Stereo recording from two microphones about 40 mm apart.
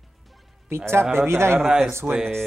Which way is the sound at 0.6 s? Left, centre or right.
Right.